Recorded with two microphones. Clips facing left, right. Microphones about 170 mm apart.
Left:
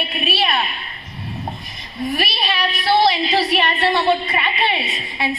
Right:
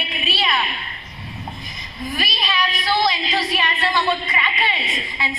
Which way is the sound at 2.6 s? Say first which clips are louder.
Left 5 dB; 30° left (ahead or behind).